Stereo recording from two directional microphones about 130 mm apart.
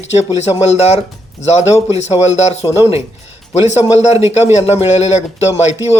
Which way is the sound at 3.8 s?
60° left (ahead or behind).